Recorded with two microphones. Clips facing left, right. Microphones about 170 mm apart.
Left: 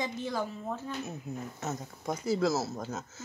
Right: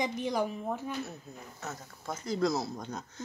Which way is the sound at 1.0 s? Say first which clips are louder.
Left 4 dB; 20° left (ahead or behind).